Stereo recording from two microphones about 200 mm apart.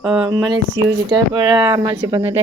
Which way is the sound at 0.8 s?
15° right (ahead or behind).